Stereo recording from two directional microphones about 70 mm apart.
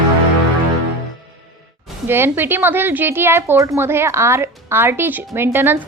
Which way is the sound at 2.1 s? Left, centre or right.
Right.